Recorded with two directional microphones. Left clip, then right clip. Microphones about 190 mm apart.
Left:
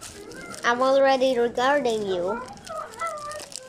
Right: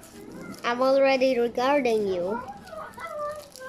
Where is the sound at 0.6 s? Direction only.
5° right (ahead or behind).